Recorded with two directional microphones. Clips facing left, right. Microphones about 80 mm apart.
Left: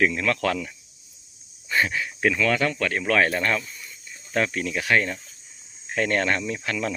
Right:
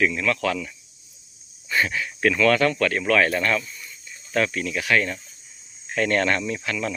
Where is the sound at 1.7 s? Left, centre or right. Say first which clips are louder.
Even; left.